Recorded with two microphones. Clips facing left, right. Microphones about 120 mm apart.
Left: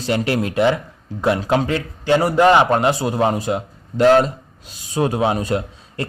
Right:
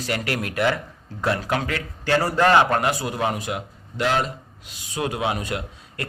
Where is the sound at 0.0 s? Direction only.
25° left (ahead or behind).